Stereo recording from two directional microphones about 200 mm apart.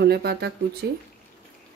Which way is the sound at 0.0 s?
55° right (ahead or behind).